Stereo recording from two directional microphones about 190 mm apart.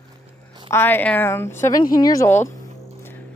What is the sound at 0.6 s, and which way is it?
Speech, 10° left (ahead or behind).